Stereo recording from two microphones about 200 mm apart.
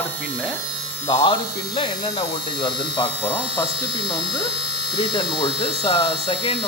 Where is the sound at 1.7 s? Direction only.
25° left (ahead or behind).